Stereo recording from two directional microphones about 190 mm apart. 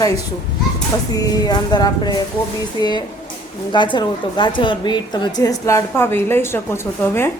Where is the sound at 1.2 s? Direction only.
20° left (ahead or behind).